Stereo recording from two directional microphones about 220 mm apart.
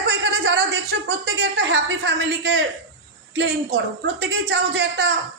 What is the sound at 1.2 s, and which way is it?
A man's voice, 55° right (ahead or behind).